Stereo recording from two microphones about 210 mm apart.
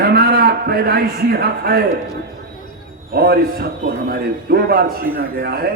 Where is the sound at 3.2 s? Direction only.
45° right (ahead or behind).